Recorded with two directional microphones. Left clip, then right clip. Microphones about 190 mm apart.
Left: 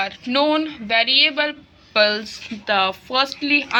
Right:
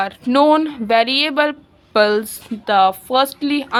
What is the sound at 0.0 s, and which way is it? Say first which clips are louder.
A woman's voice: right 5 dB; 60° right (ahead or behind).